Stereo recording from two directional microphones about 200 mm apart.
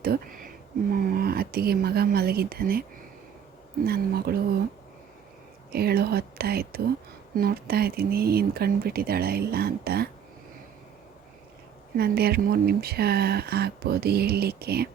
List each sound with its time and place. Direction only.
0.0 s a sound: 50° right (ahead or behind)
0.9 s speech: 45° right (ahead or behind)
3.8 s speech: 50° right (ahead or behind)
5.7 s speech: 50° right (ahead or behind)
11.9 s speech: 50° right (ahead or behind)